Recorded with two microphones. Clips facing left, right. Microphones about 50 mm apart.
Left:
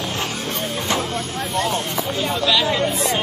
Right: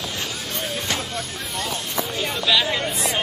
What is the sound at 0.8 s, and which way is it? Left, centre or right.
Vehicle, left.